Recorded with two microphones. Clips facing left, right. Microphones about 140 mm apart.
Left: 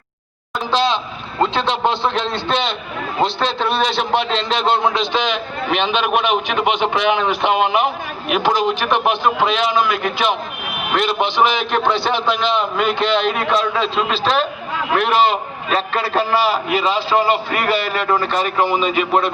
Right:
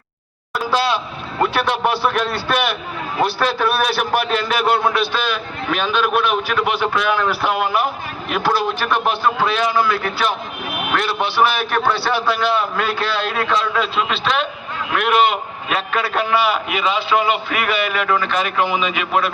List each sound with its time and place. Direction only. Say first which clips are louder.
0.7 s vehicle: left 1 dB; 20° left (ahead or behind)
1.4 s a man's voice: left 1 dB; 20° left (ahead or behind)
13.9 s a man's voice: left 2 dB; 35° left (ahead or behind)